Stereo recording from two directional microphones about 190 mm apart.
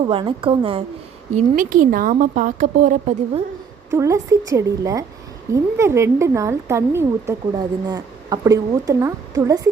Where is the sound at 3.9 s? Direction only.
15° right (ahead or behind).